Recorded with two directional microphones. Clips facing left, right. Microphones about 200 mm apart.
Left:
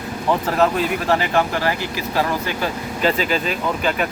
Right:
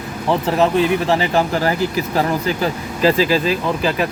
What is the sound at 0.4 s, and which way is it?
Speech, 25° right (ahead or behind).